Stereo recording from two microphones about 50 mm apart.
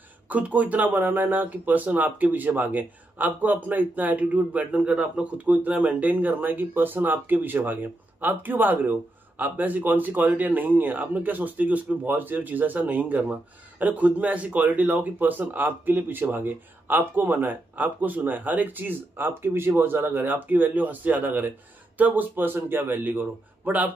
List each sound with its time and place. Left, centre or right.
0.3 s speech: right
17.7 s speech: right